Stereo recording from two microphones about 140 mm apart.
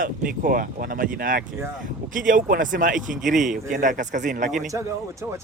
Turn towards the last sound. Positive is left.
turn(degrees=-20)  # may be behind; listen again after turning